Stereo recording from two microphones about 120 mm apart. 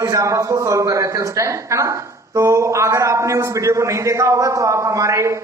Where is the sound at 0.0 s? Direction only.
25° right (ahead or behind).